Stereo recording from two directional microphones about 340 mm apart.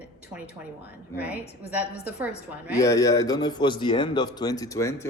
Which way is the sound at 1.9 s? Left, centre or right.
Left.